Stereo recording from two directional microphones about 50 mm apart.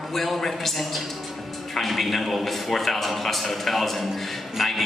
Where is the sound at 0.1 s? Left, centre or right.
Centre.